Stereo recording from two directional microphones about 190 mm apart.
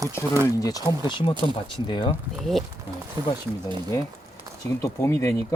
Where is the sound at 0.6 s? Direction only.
20° left (ahead or behind).